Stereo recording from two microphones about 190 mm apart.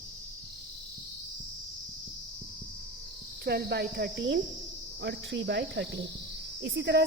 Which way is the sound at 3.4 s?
55° right (ahead or behind).